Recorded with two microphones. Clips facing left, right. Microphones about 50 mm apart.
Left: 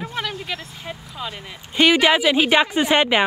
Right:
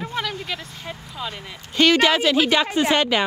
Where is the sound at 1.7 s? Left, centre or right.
Centre.